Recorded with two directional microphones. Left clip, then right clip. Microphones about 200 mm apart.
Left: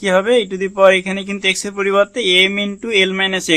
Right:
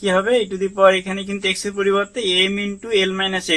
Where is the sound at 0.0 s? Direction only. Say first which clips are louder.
Left 3 dB; 45° left (ahead or behind).